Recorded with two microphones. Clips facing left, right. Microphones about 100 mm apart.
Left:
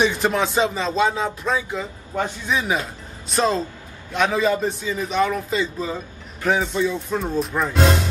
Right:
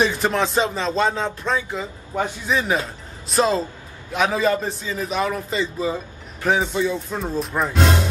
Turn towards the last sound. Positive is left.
turn(degrees=0)  # may be behind; listen again after turning